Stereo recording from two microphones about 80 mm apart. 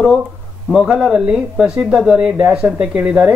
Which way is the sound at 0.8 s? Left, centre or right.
Centre.